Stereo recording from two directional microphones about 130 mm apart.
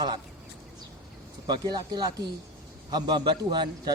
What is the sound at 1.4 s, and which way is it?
A man's voice, 35° right (ahead or behind).